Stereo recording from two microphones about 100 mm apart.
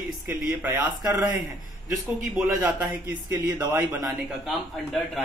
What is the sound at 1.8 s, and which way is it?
Speech, 5° right (ahead or behind).